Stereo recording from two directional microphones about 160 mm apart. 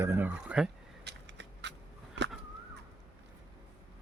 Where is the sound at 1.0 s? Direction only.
90° right.